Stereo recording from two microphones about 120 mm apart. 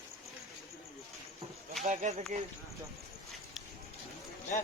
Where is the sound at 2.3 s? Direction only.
90° right.